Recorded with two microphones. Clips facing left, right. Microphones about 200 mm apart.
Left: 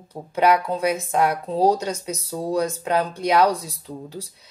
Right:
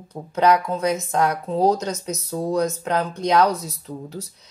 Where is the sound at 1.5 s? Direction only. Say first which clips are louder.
Even; 30° left (ahead or behind).